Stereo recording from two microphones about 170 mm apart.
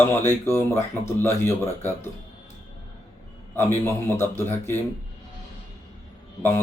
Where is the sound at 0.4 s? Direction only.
15° left (ahead or behind).